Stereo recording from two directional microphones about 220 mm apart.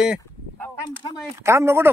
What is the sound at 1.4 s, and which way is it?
Speech, 10° right (ahead or behind).